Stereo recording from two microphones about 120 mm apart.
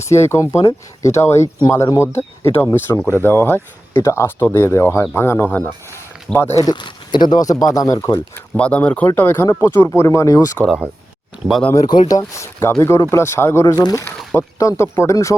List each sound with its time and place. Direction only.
0.1 s speech: 25° left (ahead or behind)
6.7 s speech: 40° left (ahead or behind)
8.5 s speech: 10° left (ahead or behind); by 10.6 s 30° left (ahead or behind)
11.7 s speech: 30° left (ahead or behind)
13.7 s speech: 35° left (ahead or behind)